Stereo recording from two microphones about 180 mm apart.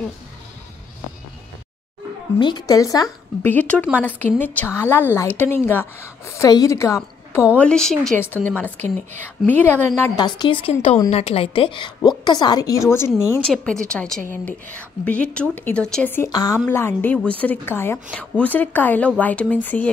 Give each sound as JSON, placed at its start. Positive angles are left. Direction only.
{"t": 2.3, "sound": "a woman's voice", "side_deg": 20}
{"t": 7.5, "sound": "a woman's voice", "side_deg": 5}
{"t": 16.3, "sound": "a woman's voice", "side_deg": 20}